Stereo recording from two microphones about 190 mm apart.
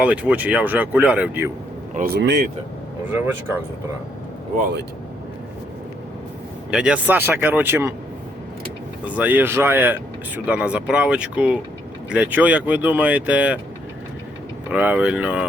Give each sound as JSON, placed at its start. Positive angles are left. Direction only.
{"t": 0.0, "sound": "speech", "side_deg": -5}
{"t": 2.1, "sound": "speech", "side_deg": -65}
{"t": 3.1, "sound": "speech", "side_deg": -10}
{"t": 6.7, "sound": "speech", "side_deg": -5}
{"t": 9.0, "sound": "speech", "side_deg": -10}
{"t": 14.7, "sound": "speech", "side_deg": -10}